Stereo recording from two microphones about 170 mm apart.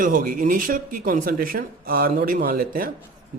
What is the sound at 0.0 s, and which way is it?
Speech, 50° right (ahead or behind).